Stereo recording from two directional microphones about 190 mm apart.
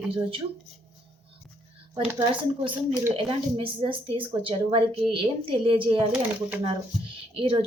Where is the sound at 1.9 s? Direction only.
25° right (ahead or behind).